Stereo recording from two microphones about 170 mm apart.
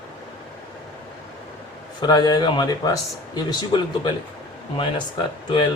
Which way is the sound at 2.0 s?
25° left (ahead or behind).